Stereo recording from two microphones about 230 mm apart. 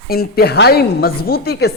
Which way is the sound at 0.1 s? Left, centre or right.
Left.